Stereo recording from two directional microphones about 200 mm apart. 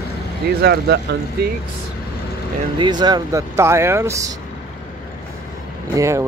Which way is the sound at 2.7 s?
20° right (ahead or behind).